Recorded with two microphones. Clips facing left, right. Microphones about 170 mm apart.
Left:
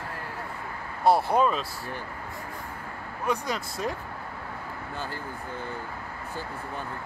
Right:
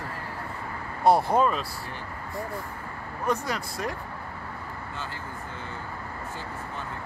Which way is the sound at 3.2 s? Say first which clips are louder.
Right 1 dB; 15° left (ahead or behind).